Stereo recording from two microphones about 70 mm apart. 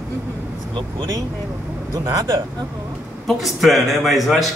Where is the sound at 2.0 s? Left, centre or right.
Right.